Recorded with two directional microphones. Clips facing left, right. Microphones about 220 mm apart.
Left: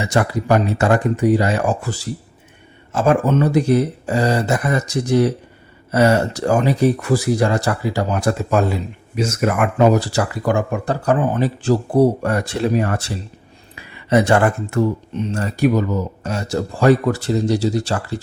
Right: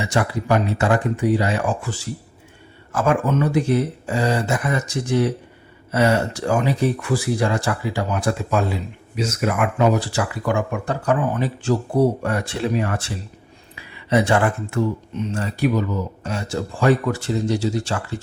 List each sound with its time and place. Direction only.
0.1 s speech: 45° left (ahead or behind)
2.9 s speech: 30° left (ahead or behind)